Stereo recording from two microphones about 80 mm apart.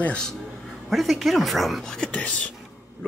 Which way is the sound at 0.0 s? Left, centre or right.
Centre.